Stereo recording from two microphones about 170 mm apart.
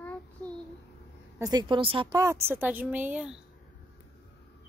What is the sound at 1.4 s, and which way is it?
Speech, 25° right (ahead or behind).